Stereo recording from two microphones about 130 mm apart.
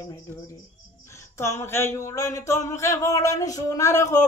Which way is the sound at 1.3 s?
20° left (ahead or behind).